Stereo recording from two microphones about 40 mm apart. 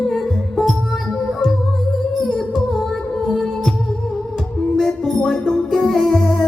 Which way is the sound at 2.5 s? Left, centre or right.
Centre.